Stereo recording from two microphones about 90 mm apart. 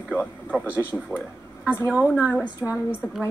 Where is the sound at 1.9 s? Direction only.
15° right (ahead or behind).